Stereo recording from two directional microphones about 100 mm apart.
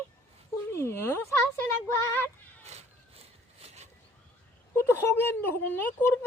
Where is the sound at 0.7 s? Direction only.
25° left (ahead or behind).